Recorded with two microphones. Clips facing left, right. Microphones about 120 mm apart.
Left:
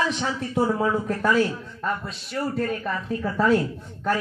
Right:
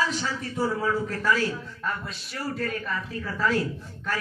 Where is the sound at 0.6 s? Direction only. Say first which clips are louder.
Left 5 dB; 65° left (ahead or behind).